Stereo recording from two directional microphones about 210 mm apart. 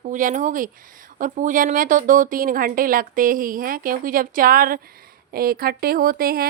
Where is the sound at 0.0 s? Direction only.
40° right (ahead or behind).